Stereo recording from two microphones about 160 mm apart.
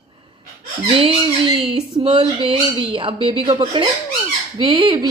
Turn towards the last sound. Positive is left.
turn(degrees=-25)  # may be behind; listen again after turning